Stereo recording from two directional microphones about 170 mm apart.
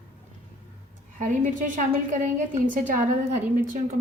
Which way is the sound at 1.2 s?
50° right (ahead or behind).